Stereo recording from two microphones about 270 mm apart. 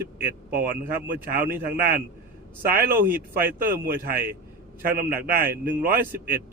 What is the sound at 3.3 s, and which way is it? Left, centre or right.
A man's voice, right.